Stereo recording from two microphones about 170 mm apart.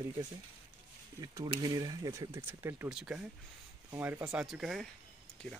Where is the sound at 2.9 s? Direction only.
5° right (ahead or behind).